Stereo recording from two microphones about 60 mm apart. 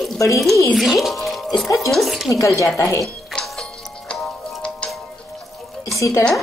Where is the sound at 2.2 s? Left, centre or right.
Left.